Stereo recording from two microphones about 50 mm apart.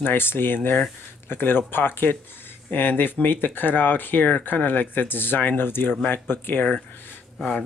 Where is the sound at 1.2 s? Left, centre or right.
Left.